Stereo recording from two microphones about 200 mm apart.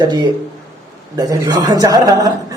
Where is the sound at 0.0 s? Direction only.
20° right (ahead or behind).